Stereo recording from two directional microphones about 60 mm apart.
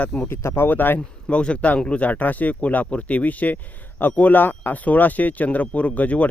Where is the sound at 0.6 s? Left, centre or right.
Left.